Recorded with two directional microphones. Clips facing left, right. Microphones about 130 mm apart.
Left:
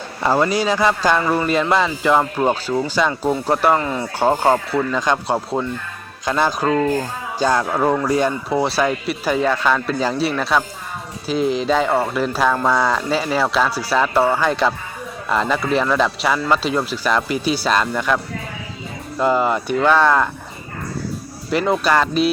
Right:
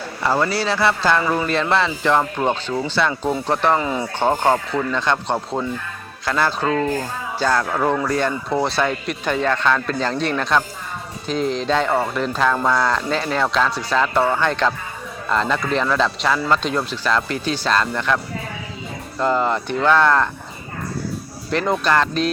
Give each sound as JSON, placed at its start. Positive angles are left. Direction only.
{"t": 0.2, "sound": "speech", "side_deg": 15}
{"t": 3.8, "sound": "speech", "side_deg": -10}
{"t": 4.2, "sound": "speech", "side_deg": 10}
{"t": 6.7, "sound": "speech", "side_deg": 5}
{"t": 7.3, "sound": "speech", "side_deg": 15}
{"t": 19.2, "sound": "speech", "side_deg": 10}
{"t": 21.5, "sound": "speech", "side_deg": 10}